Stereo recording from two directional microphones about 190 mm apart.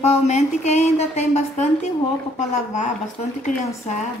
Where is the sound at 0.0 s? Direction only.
35° left (ahead or behind).